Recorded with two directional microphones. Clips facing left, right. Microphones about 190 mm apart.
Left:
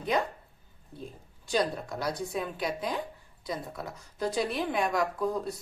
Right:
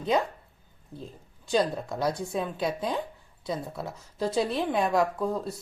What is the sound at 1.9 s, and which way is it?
A woman's voice, 25° right (ahead or behind).